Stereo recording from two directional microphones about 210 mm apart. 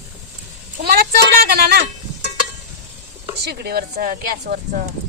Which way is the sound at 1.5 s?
50° right (ahead or behind).